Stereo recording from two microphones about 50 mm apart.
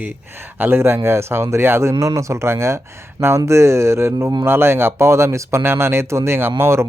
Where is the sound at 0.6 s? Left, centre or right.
Right.